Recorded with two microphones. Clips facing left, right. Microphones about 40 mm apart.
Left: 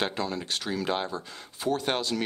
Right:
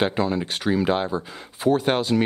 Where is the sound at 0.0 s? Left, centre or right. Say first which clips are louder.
Right 7 dB; centre.